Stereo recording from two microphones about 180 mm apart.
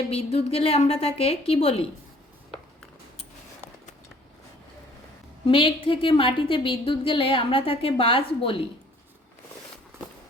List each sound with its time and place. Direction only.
0.1 s a woman's voice: 35° left (ahead or behind)
5.5 s a woman's voice: 30° left (ahead or behind)